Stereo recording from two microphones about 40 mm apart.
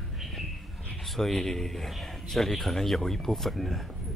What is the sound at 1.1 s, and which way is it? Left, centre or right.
Speech, centre.